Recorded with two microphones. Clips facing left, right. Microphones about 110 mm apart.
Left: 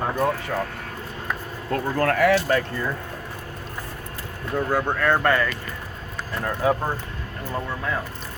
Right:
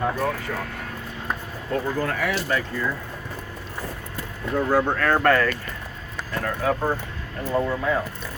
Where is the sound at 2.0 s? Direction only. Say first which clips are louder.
Left 6 dB; 60° left (ahead or behind).